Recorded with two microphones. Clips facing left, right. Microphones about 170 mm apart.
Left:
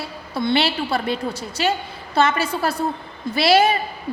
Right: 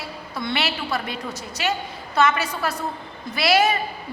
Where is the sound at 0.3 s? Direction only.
30° left (ahead or behind).